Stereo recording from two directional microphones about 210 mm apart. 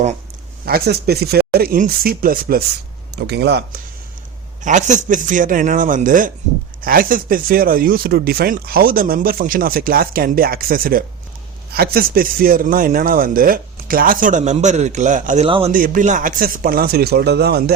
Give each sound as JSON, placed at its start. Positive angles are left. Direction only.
{"t": 0.6, "sound": "speech", "side_deg": -45}
{"t": 4.6, "sound": "speech", "side_deg": -35}
{"t": 15.4, "sound": "a man's voice", "side_deg": -25}
{"t": 15.7, "sound": "speech", "side_deg": -40}